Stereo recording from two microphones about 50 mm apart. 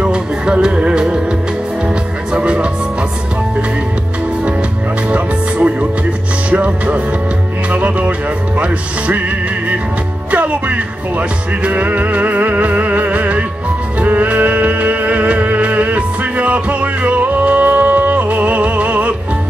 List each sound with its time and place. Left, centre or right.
0.0 s music: centre
2.3 s music: right
5.1 s music: right
10.3 s music: right